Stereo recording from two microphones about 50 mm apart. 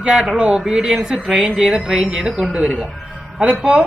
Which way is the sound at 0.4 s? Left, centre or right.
Centre.